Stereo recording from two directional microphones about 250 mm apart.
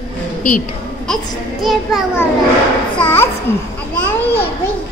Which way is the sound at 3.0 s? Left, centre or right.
Centre.